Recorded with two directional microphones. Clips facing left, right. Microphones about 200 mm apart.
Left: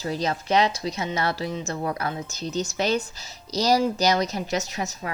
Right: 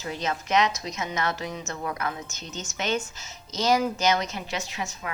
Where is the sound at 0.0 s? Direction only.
35° left (ahead or behind).